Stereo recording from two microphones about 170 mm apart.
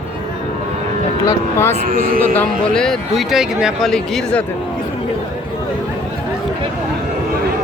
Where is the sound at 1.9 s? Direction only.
55° right (ahead or behind).